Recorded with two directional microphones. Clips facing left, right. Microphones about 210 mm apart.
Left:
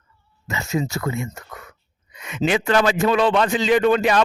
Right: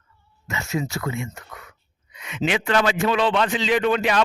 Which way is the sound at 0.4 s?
35° left (ahead or behind).